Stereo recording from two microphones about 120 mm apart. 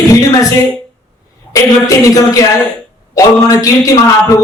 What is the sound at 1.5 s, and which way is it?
Speech, 30° left (ahead or behind).